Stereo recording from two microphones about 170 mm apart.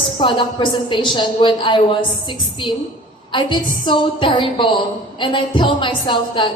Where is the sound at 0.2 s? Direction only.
30° left (ahead or behind).